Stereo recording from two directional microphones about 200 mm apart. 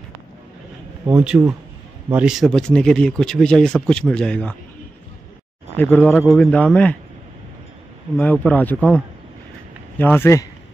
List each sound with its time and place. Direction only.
1.1 s speech: 5° right (ahead or behind)
5.8 s a man's voice: 10° left (ahead or behind)
8.2 s a man's voice: 10° left (ahead or behind)